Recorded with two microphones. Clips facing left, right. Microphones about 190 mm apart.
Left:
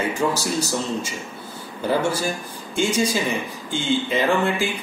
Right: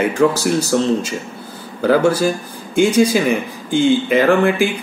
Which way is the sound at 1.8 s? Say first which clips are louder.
Right 8 dB; 85° right.